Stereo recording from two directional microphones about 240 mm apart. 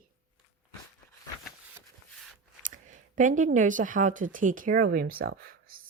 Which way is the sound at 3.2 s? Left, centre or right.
Right.